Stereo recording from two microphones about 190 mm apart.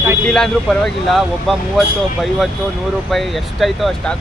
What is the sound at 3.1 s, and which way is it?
Speech, centre (ahead or behind).